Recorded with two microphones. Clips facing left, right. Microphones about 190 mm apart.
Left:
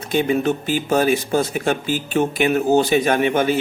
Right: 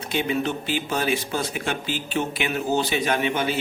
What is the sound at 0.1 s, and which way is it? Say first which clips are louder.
Speech: left 6 dB; 45° left (ahead or behind).